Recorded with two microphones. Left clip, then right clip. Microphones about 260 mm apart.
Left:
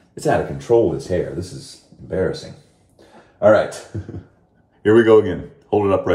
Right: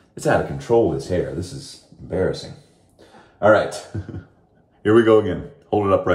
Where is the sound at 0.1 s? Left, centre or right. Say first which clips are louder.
Even; centre.